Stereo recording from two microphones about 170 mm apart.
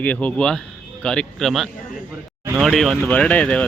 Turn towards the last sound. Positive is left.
turn(degrees=5)  # may be behind; listen again after turning